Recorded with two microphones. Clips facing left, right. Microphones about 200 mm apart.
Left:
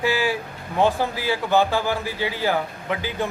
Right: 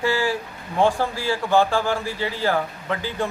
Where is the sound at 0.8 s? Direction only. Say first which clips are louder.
Even; centre (ahead or behind).